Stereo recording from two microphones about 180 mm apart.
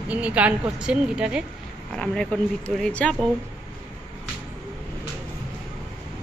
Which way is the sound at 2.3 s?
10° left (ahead or behind).